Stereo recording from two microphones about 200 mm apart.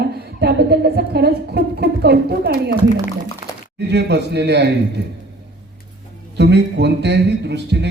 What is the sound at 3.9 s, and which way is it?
Speech, 55° right (ahead or behind).